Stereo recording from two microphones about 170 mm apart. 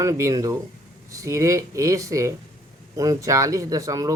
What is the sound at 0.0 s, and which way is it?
Speech, 20° right (ahead or behind).